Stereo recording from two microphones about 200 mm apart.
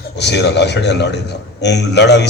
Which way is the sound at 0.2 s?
60° left (ahead or behind).